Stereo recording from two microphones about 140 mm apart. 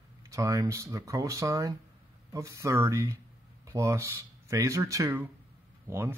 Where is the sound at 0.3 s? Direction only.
25° right (ahead or behind).